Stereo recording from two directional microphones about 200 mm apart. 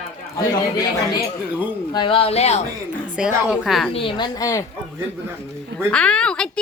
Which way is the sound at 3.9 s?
25° left (ahead or behind).